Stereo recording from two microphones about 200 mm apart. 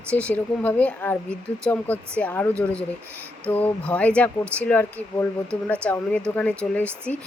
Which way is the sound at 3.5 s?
10° left (ahead or behind).